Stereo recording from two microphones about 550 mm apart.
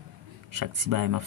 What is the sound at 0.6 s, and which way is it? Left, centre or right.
Speech, right.